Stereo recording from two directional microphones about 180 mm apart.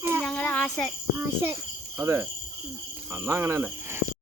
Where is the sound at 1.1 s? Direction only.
15° right (ahead or behind).